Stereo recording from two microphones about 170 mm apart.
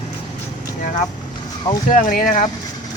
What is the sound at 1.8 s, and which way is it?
Speech, 55° left (ahead or behind).